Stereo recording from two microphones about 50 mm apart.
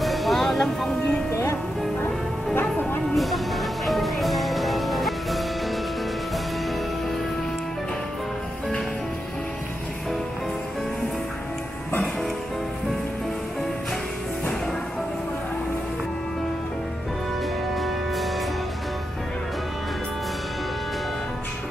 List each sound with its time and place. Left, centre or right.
0.0 s music: centre
1.3 s music: left
3.2 s music: centre
17.7 s music: centre